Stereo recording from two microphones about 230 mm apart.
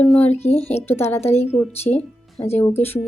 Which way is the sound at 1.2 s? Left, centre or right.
Left.